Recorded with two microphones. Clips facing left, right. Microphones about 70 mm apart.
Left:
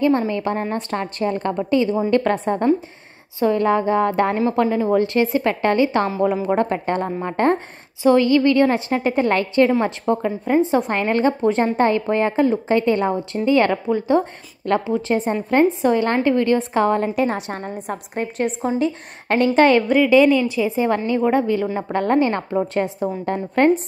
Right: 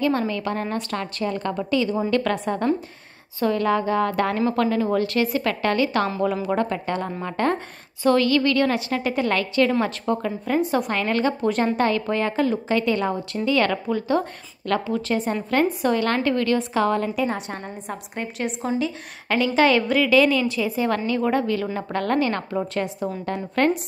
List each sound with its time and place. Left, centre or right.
0.3 s a woman's voice: left
8.0 s a woman's voice: centre
17.1 s a woman's voice: left
19.9 s a woman's voice: left